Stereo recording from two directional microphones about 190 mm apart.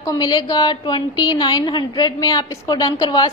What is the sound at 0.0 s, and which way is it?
A woman's voice, 20° left (ahead or behind).